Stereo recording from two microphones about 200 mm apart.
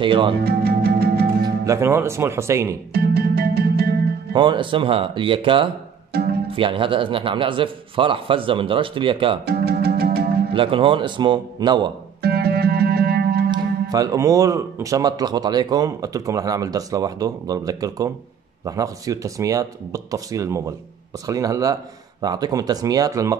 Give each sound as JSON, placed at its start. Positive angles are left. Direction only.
{"t": 0.0, "sound": "a man's voice", "side_deg": -25}
{"t": 0.4, "sound": "music", "side_deg": -50}
{"t": 1.4, "sound": "speech", "side_deg": -15}
{"t": 2.9, "sound": "music", "side_deg": -50}
{"t": 4.3, "sound": "a man's voice", "side_deg": -25}
{"t": 6.1, "sound": "music", "side_deg": -50}
{"t": 6.5, "sound": "a man's voice", "side_deg": -25}
{"t": 9.5, "sound": "music", "side_deg": -50}
{"t": 10.5, "sound": "a man's voice", "side_deg": -25}
{"t": 12.2, "sound": "music", "side_deg": -55}
{"t": 13.5, "sound": "a man's voice", "side_deg": -20}